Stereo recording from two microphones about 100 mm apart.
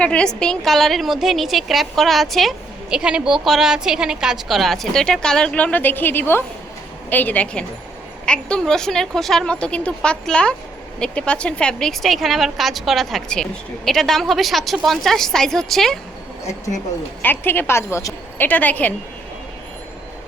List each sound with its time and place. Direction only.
0.0 s a woman's voice: 10° left (ahead or behind)
3.0 s a woman's voice: 10° right (ahead or behind)
17.2 s a woman's voice: 20° left (ahead or behind)
18.4 s speech: 15° left (ahead or behind)